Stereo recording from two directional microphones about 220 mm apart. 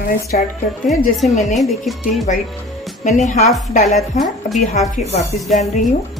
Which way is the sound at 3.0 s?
30° left (ahead or behind).